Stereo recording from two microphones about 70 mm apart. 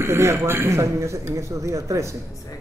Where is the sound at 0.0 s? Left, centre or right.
Right.